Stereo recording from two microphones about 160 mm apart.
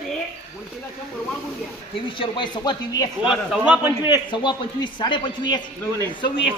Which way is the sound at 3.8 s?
15° right (ahead or behind).